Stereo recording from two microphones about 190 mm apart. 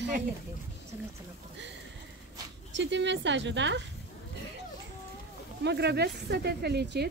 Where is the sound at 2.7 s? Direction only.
70° right (ahead or behind).